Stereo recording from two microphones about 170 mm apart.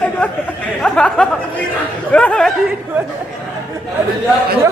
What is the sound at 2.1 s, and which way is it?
Chatter, 5° left (ahead or behind).